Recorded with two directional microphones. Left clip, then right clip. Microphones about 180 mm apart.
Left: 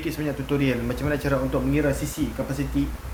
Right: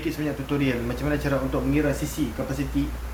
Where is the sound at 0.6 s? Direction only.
55° left (ahead or behind).